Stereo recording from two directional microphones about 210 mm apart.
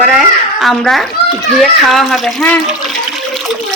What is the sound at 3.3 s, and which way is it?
Water, centre (ahead or behind).